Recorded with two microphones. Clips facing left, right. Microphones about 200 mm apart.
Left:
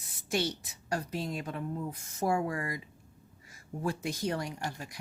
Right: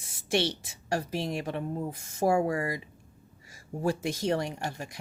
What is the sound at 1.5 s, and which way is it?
Speech, 30° right (ahead or behind).